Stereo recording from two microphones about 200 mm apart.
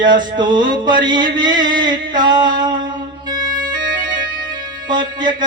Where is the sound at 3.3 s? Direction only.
20° right (ahead or behind).